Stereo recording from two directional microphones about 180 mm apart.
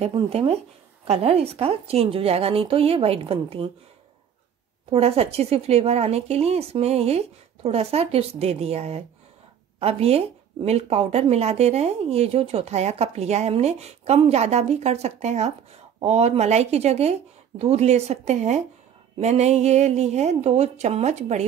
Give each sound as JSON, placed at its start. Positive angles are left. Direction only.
{"t": 0.0, "sound": "speech", "side_deg": -30}
{"t": 4.9, "sound": "speech", "side_deg": -35}